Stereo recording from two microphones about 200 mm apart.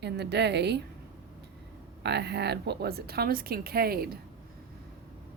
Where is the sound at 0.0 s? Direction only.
55° right (ahead or behind).